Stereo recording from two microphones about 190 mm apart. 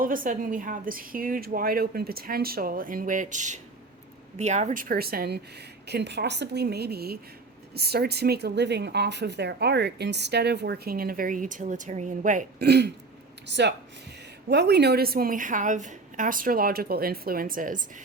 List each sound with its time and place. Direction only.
0.0 s a woman's voice: 45° right (ahead or behind)